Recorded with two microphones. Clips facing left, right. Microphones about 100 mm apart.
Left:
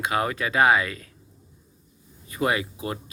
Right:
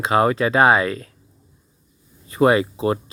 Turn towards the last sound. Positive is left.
turn(degrees=-35)  # may be behind; listen again after turning